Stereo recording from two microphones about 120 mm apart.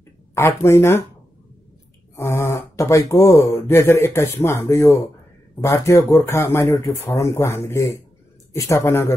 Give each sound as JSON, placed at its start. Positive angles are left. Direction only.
{"t": 0.3, "sound": "speech", "side_deg": 25}
{"t": 2.1, "sound": "speech", "side_deg": 20}